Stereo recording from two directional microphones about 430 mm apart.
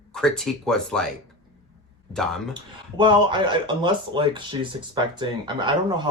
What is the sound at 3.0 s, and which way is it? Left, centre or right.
Speech, centre.